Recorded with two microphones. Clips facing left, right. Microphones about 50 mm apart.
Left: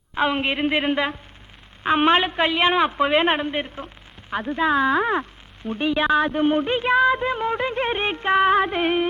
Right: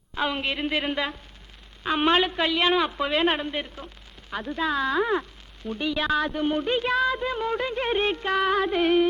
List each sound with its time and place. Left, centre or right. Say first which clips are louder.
0.1 s speech: left 5 dB; left